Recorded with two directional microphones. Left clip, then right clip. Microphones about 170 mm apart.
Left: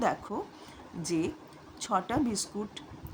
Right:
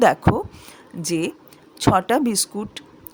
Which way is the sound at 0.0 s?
55° right (ahead or behind).